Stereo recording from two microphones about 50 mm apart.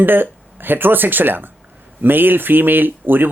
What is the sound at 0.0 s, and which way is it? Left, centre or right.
Speech, right.